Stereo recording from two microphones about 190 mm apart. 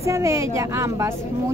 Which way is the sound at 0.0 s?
15° right (ahead or behind).